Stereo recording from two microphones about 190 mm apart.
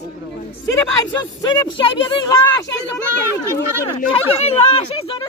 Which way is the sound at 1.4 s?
25° left (ahead or behind).